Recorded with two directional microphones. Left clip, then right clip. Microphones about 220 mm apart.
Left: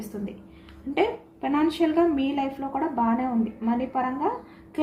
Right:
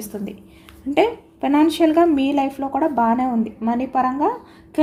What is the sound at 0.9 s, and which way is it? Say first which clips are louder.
A woman's voice: right 7 dB; 55° right (ahead or behind).